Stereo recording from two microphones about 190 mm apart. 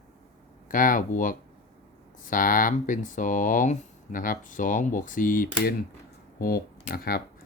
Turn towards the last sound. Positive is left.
turn(degrees=50)  # may be behind; listen again after turning